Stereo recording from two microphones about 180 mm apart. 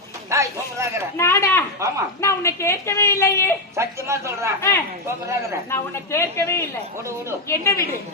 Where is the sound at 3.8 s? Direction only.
15° right (ahead or behind).